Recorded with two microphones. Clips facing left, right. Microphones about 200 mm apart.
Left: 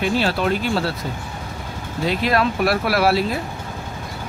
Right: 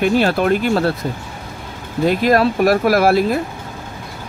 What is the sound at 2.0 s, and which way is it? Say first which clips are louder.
Speech: right 6 dB; 50° right (ahead or behind).